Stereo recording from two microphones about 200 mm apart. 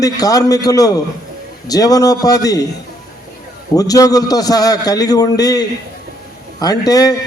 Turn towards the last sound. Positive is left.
turn(degrees=20)  # may be behind; listen again after turning